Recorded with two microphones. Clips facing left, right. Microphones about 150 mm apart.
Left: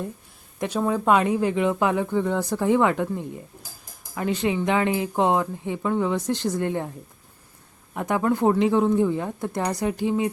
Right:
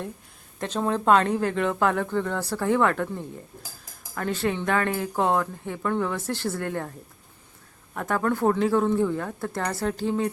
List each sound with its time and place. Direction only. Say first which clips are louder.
0.6 s speech: left 2 dB; 10° left (ahead or behind)
7.9 s speech: left 2 dB; 15° left (ahead or behind)